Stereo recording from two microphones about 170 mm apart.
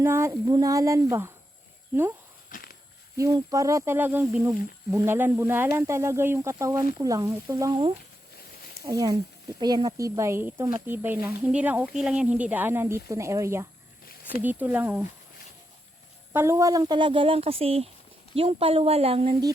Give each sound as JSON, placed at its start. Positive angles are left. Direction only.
{"t": 0.0, "sound": "speech", "side_deg": -15}
{"t": 2.5, "sound": "walk", "side_deg": 55}
{"t": 3.2, "sound": "speech", "side_deg": -20}
{"t": 16.3, "sound": "speech", "side_deg": -15}